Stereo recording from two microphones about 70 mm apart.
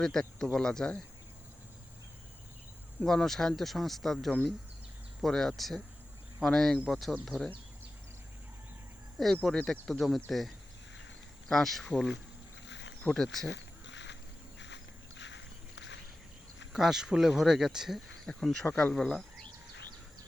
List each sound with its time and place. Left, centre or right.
0.0 s a man's voice: centre
3.1 s speech: centre
9.1 s speech: centre
13.1 s a man's voice: centre
16.7 s speech: centre
18.4 s a man's voice: centre